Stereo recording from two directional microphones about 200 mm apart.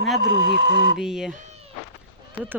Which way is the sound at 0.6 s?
70° right (ahead or behind).